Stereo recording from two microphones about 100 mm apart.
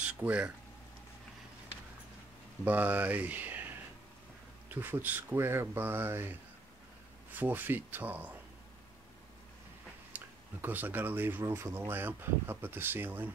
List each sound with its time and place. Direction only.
0.0 s a sound: 15° right (ahead or behind)
2.6 s speech: 20° right (ahead or behind)
7.3 s speech: 20° right (ahead or behind)
10.1 s speech: 20° right (ahead or behind)